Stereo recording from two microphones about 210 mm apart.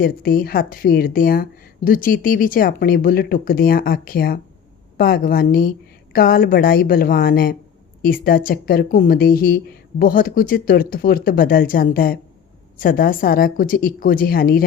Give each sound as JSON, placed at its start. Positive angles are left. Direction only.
{"t": 0.0, "sound": "speech", "side_deg": 45}